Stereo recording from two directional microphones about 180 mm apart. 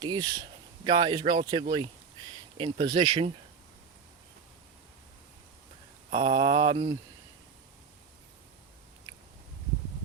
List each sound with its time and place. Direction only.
0.0 s mantra: 20° right (ahead or behind)
6.1 s mantra: 30° right (ahead or behind)